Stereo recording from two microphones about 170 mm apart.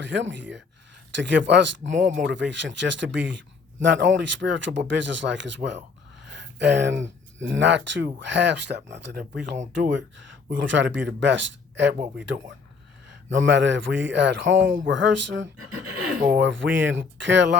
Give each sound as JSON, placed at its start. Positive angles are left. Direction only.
{"t": 0.0, "sound": "a man's voice", "side_deg": -90}
{"t": 3.2, "sound": "a sound", "side_deg": -90}
{"t": 4.1, "sound": "a man's voice", "side_deg": -90}
{"t": 13.3, "sound": "a man's voice", "side_deg": -90}